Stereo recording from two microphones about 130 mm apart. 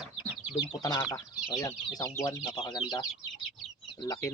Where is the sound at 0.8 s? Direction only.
30° left (ahead or behind).